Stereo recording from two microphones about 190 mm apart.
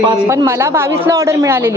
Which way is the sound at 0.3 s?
15° right (ahead or behind).